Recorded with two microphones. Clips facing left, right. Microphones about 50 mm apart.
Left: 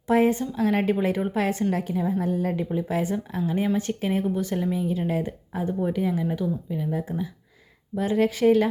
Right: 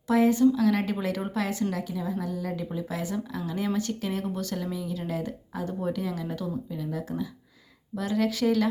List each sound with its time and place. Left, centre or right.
0.1 s speech: left
0.9 s speech: left